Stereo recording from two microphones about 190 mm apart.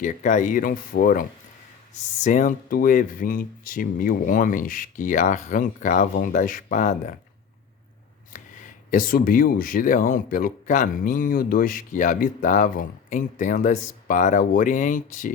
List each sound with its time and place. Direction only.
0.0 s speech: 40° left (ahead or behind)
8.3 s speech: 45° left (ahead or behind)